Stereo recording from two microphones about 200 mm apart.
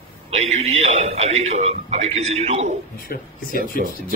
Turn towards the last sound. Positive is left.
turn(degrees=45)  # may be behind; listen again after turning